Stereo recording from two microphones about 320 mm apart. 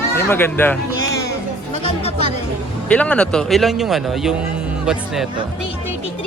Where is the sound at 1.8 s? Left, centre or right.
Centre.